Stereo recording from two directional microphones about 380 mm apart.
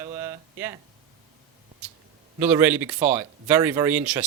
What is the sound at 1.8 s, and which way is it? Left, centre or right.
Speech, centre.